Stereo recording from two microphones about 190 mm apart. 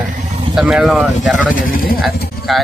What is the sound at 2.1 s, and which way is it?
Pigeon, 55° left (ahead or behind).